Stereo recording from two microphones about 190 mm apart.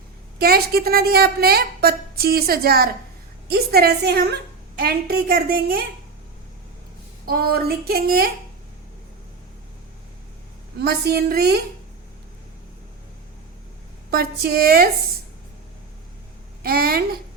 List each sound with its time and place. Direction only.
0.3 s a woman's voice: 55° right (ahead or behind)
7.3 s a woman's voice: 55° right (ahead or behind)
10.8 s a woman's voice: 60° right (ahead or behind)
14.1 s a woman's voice: 55° right (ahead or behind)
16.6 s a woman's voice: 50° right (ahead or behind)